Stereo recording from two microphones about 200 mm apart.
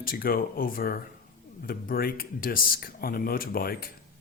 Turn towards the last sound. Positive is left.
turn(degrees=45)  # may be behind; listen again after turning